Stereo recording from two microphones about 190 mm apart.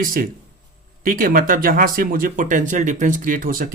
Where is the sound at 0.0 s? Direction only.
50° right (ahead or behind).